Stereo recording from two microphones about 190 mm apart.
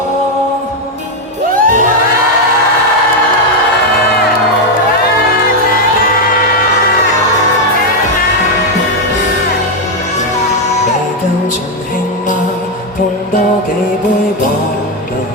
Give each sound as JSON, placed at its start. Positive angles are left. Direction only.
{"t": 1.5, "sound": "music", "side_deg": -45}